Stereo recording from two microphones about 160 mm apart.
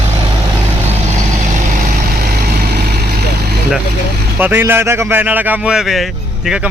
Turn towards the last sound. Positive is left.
turn(degrees=-5)  # may be behind; listen again after turning